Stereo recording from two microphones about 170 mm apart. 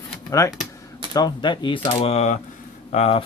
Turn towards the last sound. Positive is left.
turn(degrees=35)  # may be behind; listen again after turning